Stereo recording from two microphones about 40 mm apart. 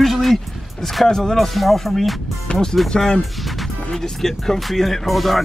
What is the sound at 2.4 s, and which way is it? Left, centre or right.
Speech, centre.